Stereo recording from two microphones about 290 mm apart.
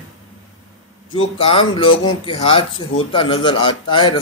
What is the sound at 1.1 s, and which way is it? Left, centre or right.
A man's voice, centre.